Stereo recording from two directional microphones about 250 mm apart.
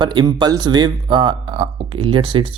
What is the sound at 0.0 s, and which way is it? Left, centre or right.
Speech, centre.